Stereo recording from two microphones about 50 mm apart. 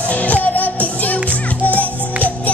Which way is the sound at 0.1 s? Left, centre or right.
Left.